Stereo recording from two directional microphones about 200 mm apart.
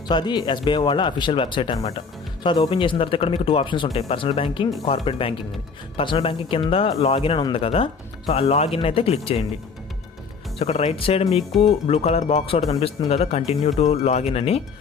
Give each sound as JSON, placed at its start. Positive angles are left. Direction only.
{"t": 0.1, "sound": "speech", "side_deg": 20}
{"t": 10.6, "sound": "speech", "side_deg": 30}